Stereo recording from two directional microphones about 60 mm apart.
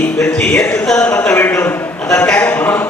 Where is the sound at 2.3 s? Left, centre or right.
Left.